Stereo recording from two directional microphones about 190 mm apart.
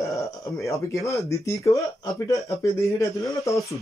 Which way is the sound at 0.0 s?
15° left (ahead or behind).